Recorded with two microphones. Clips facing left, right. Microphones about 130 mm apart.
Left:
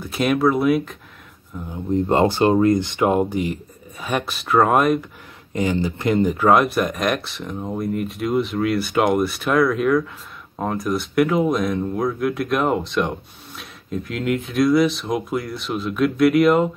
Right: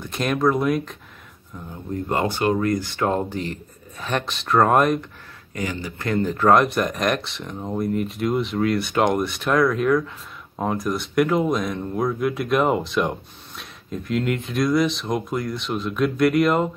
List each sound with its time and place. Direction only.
0.0 s speech: 5° left (ahead or behind)
1.7 s speech: 25° left (ahead or behind); by 5.0 s centre (ahead or behind)
5.5 s speech: 25° left (ahead or behind)
6.3 s speech: 5° left (ahead or behind)